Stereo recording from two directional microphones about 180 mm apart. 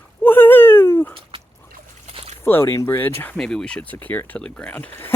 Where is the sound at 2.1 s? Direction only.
35° right (ahead or behind).